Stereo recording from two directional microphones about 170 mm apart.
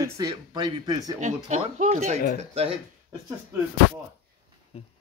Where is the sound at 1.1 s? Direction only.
45° right (ahead or behind).